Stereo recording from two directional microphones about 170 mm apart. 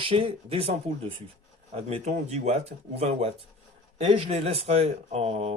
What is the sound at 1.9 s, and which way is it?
Speech, 40° right (ahead or behind).